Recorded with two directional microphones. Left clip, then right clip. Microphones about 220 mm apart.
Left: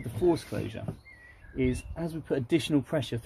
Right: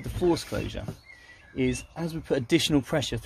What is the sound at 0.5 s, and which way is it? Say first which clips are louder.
Speech: right 3 dB; 30° right (ahead or behind).